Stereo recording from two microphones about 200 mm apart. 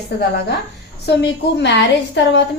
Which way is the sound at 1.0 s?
55° left (ahead or behind).